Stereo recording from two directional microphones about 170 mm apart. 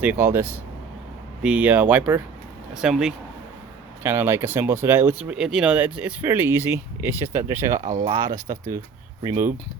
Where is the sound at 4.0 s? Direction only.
15° right (ahead or behind).